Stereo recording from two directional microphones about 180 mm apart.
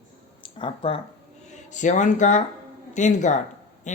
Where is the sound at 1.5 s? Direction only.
40° left (ahead or behind).